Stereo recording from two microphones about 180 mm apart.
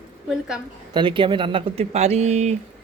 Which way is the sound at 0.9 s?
25° right (ahead or behind).